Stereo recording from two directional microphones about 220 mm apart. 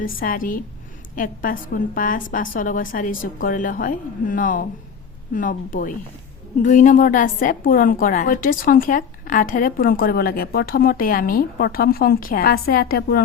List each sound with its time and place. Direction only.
0.0 s a woman's voice: 40° left (ahead or behind)